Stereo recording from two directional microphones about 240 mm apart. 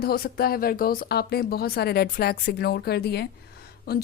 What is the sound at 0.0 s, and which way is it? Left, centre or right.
Speech, left.